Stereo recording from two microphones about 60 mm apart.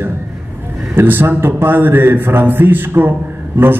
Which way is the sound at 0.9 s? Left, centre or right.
Right.